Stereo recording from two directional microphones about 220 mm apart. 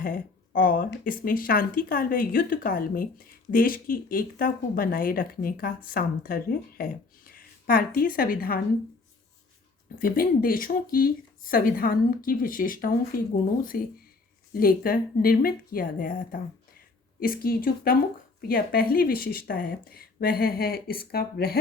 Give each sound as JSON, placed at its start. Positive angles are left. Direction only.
{"t": 0.0, "sound": "speech", "side_deg": 40}
{"t": 10.0, "sound": "speech", "side_deg": 40}